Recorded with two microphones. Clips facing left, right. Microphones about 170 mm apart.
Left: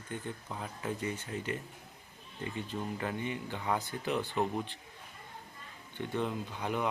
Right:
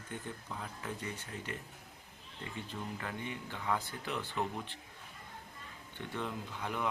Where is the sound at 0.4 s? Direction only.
20° left (ahead or behind).